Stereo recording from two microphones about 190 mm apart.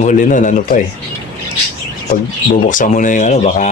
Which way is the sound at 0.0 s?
40° left (ahead or behind).